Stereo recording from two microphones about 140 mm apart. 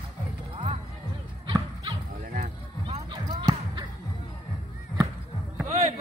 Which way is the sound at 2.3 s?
55° right (ahead or behind).